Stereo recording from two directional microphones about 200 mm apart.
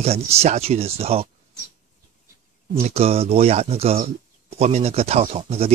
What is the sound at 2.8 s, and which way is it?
Speech, 30° right (ahead or behind).